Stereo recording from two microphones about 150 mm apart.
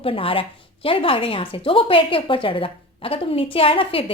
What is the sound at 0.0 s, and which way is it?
Speech, 40° left (ahead or behind).